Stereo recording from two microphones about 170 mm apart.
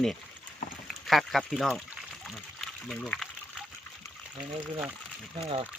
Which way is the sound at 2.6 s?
5° left (ahead or behind).